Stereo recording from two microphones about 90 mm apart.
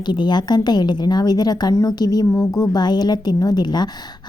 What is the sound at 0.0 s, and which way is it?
Speech, 55° left (ahead or behind).